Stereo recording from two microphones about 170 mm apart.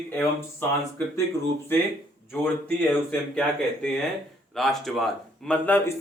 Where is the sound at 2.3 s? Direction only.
10° left (ahead or behind).